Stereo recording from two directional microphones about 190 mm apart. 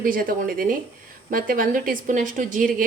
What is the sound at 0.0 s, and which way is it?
A woman's voice, 50° right (ahead or behind).